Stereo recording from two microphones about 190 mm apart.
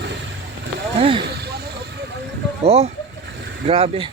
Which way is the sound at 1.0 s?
30° right (ahead or behind).